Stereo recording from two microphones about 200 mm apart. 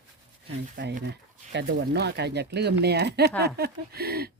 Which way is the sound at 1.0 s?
55° right (ahead or behind).